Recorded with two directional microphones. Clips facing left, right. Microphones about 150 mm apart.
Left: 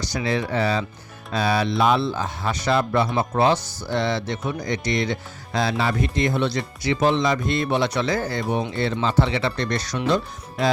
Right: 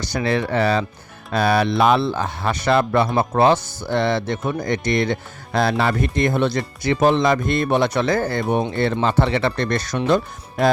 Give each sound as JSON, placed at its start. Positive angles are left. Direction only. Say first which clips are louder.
{"t": 0.0, "sound": "speech", "louder": "right 3 dB", "side_deg": -60}